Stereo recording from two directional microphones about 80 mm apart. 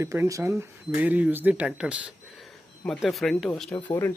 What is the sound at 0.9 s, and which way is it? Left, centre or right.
Speech, right.